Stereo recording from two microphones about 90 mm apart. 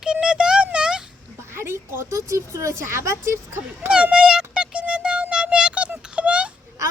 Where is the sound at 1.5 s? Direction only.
25° right (ahead or behind).